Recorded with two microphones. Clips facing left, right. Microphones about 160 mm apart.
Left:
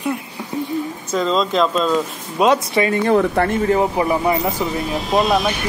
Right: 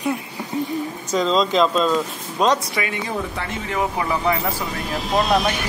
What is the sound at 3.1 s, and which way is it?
Speech, 60° left (ahead or behind).